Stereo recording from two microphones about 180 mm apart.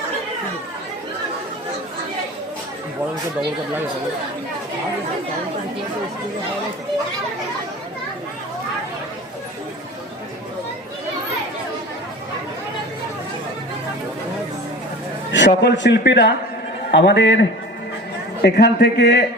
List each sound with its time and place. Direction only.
15.3 s a man's voice: 80° left
18.4 s a man's voice: 65° left (ahead or behind)